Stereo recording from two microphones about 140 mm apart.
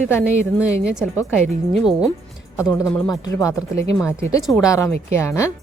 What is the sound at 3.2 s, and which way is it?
Speech, 25° left (ahead or behind).